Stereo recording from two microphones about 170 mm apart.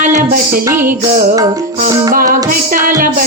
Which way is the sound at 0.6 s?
15° right (ahead or behind).